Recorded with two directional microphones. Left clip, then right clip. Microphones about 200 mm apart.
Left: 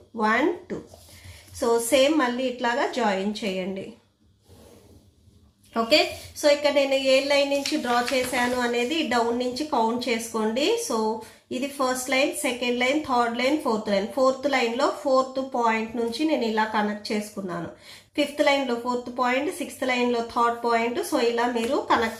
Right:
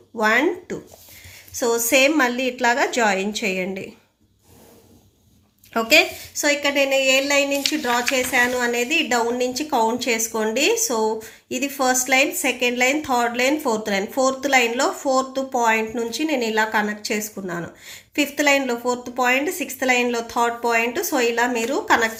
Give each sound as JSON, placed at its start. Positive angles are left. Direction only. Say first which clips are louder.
{"t": 0.2, "sound": "a woman's voice", "louder": "right 4 dB", "side_deg": -30}
{"t": 5.7, "sound": "a woman's voice", "louder": "right 5 dB", "side_deg": -35}